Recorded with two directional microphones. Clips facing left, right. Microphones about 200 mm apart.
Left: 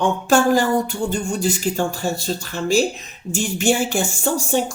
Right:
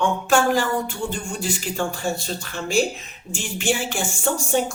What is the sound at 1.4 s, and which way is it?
Speech, 40° left (ahead or behind).